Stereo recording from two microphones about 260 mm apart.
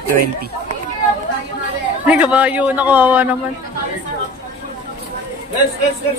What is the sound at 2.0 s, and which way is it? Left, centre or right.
A man's voice, centre.